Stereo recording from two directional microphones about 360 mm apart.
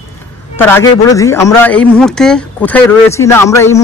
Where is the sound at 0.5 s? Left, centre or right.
Centre.